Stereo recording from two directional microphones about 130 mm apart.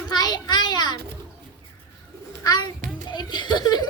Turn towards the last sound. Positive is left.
turn(degrees=30)  # may be behind; listen again after turning